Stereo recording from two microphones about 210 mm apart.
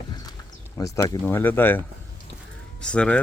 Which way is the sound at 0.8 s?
15° left (ahead or behind).